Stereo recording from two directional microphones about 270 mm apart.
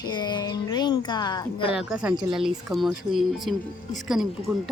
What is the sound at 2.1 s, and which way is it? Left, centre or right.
Speech, centre.